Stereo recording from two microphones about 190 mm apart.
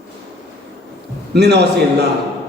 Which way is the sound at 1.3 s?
60° right (ahead or behind).